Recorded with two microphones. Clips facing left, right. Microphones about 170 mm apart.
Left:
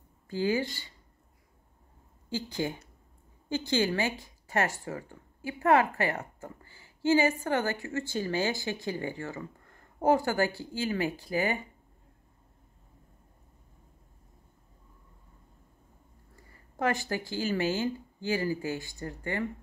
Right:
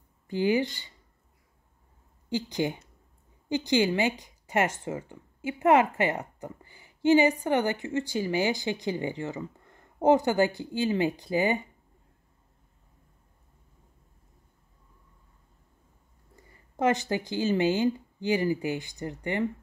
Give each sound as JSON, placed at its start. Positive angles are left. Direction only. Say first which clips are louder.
{"t": 0.3, "sound": "speech", "louder": "right 3 dB", "side_deg": -20}
{"t": 2.2, "sound": "speech", "louder": "right 4 dB", "side_deg": -15}
{"t": 16.3, "sound": "speech", "louder": "right 4 dB", "side_deg": -20}